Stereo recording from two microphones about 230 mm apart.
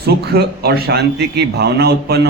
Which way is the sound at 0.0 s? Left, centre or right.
Right.